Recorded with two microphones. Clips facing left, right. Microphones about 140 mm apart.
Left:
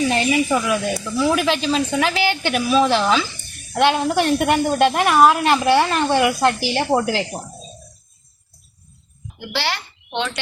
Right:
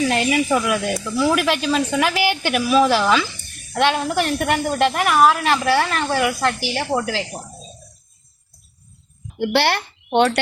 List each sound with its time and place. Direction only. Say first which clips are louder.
0.0 s speech: even; centre (ahead or behind)
4.4 s a woman's voice: left 2 dB; 20° left (ahead or behind)
9.4 s speech: right 7 dB; 60° right (ahead or behind)